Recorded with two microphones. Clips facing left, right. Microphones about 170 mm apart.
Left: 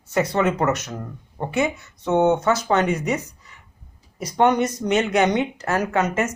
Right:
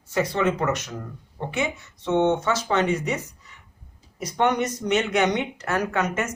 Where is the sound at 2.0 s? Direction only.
40° left (ahead or behind).